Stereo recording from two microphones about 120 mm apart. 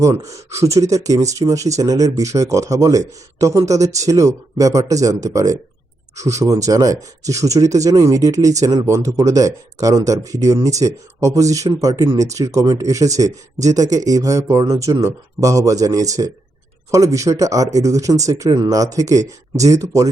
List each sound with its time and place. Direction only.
0.0 s speech: 25° right (ahead or behind)